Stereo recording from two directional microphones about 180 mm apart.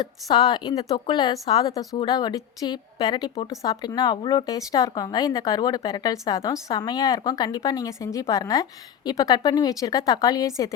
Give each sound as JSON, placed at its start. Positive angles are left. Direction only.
{"t": 0.0, "sound": "speech", "side_deg": 20}